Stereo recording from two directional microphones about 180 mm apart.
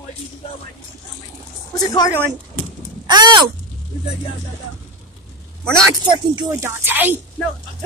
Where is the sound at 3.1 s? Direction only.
25° right (ahead or behind).